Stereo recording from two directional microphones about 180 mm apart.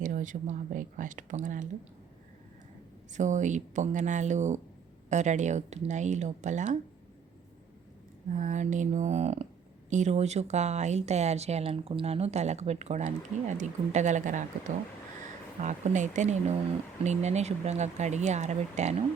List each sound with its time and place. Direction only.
0.0 s speech: 45° right (ahead or behind)
3.1 s speech: 45° right (ahead or behind)
8.3 s speech: 40° right (ahead or behind)
15.6 s speech: 40° right (ahead or behind)